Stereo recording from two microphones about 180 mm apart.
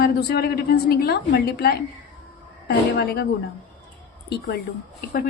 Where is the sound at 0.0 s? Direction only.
60° left (ahead or behind).